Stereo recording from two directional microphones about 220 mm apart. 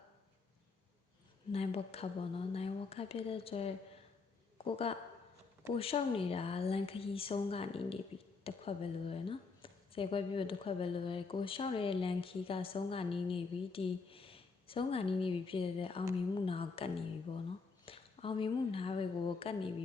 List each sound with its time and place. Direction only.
1.5 s a woman's voice: 25° left (ahead or behind)